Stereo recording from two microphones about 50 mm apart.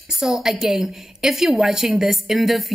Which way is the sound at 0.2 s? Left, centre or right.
Centre.